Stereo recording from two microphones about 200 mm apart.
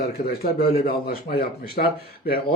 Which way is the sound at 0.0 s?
50° left (ahead or behind).